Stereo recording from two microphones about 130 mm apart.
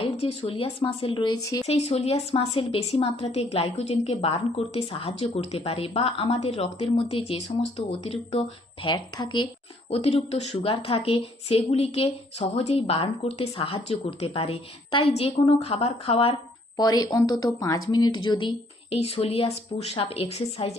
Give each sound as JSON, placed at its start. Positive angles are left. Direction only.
{"t": 0.0, "sound": "a woman's voice", "side_deg": 55}
{"t": 1.6, "sound": "a woman's voice", "side_deg": 50}
{"t": 9.9, "sound": "a woman's voice", "side_deg": 50}
{"t": 16.7, "sound": "speech", "side_deg": 30}
{"t": 18.9, "sound": "a woman's voice", "side_deg": 50}